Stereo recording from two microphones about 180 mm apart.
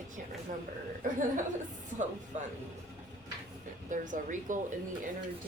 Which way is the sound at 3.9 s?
45° right (ahead or behind).